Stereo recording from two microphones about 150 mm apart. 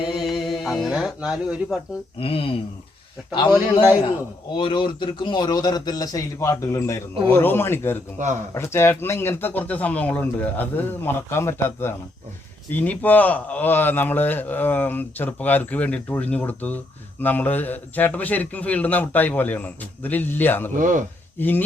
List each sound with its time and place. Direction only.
0.2 s a sound: centre (ahead or behind)
2.1 s speech: 35° left (ahead or behind)
4.5 s a man's voice: 35° left (ahead or behind); by 20.7 s 15° left (ahead or behind)
20.7 s speech: 60° right (ahead or behind)
21.3 s speech: 15° left (ahead or behind)